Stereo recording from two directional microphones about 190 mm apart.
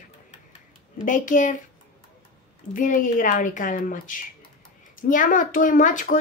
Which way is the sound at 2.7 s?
45° left (ahead or behind).